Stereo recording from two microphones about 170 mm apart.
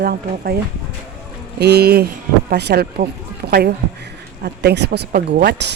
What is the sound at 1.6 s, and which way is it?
Speech, 70° right (ahead or behind).